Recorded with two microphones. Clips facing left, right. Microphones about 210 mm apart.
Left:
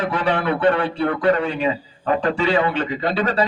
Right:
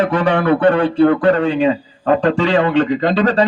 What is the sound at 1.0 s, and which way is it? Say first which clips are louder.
Speech: right 6 dB; 45° right (ahead or behind).